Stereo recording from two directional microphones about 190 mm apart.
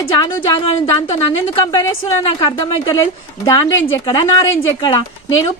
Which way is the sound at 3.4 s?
15° left (ahead or behind).